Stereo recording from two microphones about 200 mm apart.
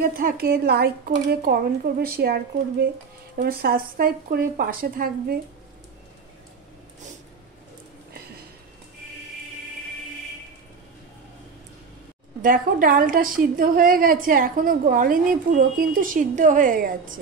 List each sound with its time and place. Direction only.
0.2 s a woman's voice: 50° right (ahead or behind)
12.4 s a woman's voice: 40° right (ahead or behind)